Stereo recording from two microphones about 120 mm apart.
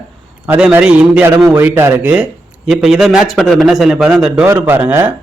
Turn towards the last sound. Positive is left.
turn(degrees=-15)  # may be behind; listen again after turning